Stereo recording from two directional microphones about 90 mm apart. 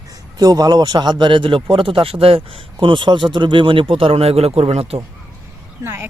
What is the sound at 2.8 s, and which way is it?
Speech, 60° right (ahead or behind).